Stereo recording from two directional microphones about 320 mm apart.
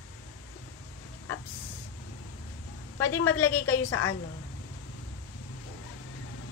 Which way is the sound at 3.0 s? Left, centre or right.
Left.